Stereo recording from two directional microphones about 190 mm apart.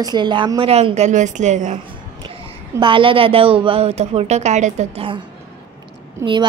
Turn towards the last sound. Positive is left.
turn(degrees=-15)  # may be behind; listen again after turning